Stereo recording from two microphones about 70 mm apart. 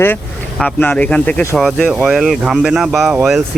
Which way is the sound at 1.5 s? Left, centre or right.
Centre.